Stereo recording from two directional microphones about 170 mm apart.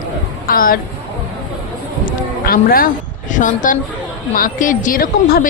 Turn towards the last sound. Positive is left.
turn(degrees=60)  # may be behind; listen again after turning